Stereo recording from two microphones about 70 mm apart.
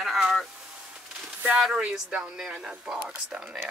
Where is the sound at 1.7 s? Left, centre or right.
Centre.